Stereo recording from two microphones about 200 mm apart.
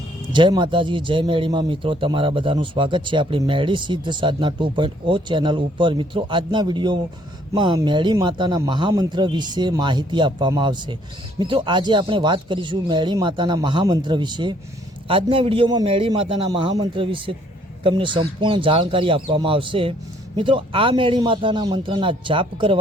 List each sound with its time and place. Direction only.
0.3 s speech: 25° right (ahead or behind)